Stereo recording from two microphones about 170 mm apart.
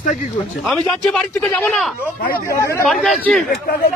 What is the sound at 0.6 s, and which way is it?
Speech, 5° left (ahead or behind).